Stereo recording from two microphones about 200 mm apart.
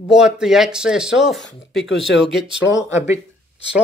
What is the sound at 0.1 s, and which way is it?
Speech, 5° right (ahead or behind).